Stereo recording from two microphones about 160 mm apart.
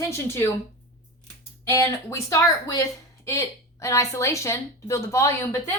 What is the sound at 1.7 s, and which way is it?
A woman's voice, 20° left (ahead or behind).